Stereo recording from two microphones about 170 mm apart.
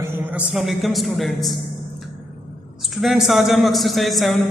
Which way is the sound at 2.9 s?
Centre (ahead or behind).